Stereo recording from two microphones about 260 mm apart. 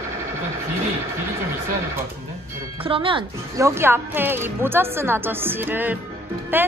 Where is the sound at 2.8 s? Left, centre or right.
Centre.